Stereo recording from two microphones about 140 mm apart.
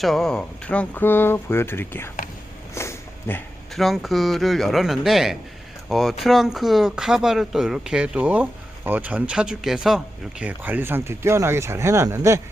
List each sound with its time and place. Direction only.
0.0 s speech: centre (ahead or behind)
2.7 s a sound: 15° left (ahead or behind)
3.8 s speech: centre (ahead or behind); by 12.4 s 20° right (ahead or behind)